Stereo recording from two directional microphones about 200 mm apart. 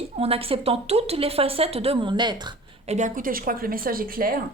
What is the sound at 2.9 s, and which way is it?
A woman's voice, 40° right (ahead or behind).